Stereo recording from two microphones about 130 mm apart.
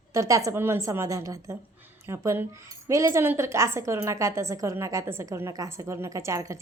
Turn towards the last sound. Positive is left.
turn(degrees=-25)  # may be behind; listen again after turning